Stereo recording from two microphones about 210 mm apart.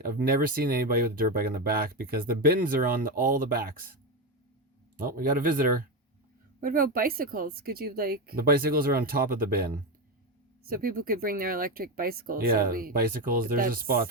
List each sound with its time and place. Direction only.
0.0 s speech: 45° right (ahead or behind)
4.9 s speech: 40° right (ahead or behind)